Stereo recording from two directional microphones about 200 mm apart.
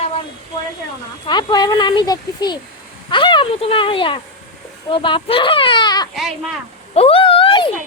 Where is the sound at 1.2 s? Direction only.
20° left (ahead or behind).